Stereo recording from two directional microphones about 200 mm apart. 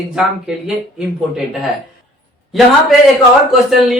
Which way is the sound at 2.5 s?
Centre (ahead or behind).